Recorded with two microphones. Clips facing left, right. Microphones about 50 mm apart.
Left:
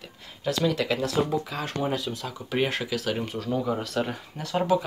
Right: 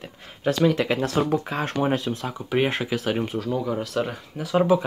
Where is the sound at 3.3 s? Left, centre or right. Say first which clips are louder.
Right 2 dB; centre.